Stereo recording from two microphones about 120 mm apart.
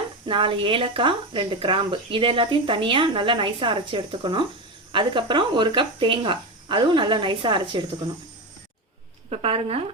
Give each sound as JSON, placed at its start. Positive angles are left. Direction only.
{"t": 0.3, "sound": "speech", "side_deg": -45}
{"t": 9.3, "sound": "speech", "side_deg": -55}